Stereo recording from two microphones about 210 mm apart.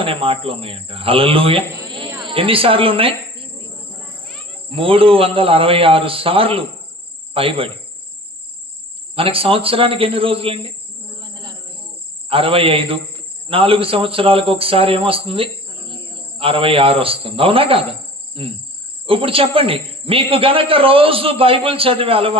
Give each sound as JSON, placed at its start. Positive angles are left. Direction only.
{"t": 0.0, "sound": "speech", "side_deg": -25}
{"t": 4.7, "sound": "speech", "side_deg": -25}
{"t": 9.1, "sound": "speech", "side_deg": -25}
{"t": 11.2, "sound": "a sound", "side_deg": -20}
{"t": 12.3, "sound": "speech", "side_deg": -25}